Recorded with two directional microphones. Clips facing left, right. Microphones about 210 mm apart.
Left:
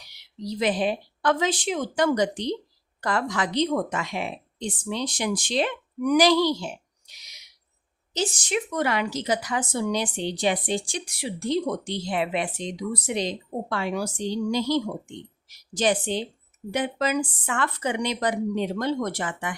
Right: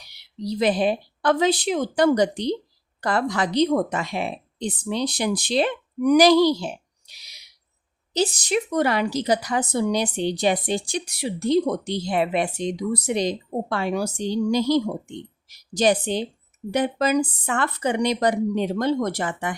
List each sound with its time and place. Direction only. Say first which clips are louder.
0.4 s speech: right 4 dB; 35° right (ahead or behind)